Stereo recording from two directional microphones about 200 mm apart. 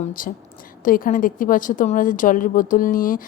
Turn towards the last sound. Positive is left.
turn(degrees=45)  # may be behind; listen again after turning